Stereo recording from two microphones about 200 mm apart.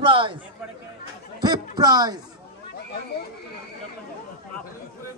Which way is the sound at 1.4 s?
20° right (ahead or behind).